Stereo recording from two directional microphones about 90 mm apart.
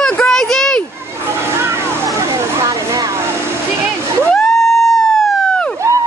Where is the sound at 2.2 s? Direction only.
35° right (ahead or behind).